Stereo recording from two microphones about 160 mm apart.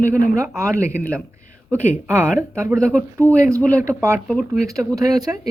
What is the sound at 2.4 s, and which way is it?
Speech, 15° right (ahead or behind).